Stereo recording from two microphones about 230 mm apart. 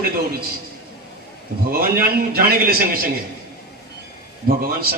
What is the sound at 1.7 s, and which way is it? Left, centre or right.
A man's voice, right.